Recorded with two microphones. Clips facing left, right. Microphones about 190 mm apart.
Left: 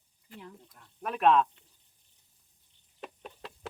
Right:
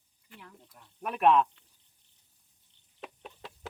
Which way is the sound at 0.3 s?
25° left (ahead or behind).